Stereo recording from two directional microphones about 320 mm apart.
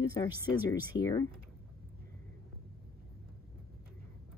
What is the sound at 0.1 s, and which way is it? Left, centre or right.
Speech, centre.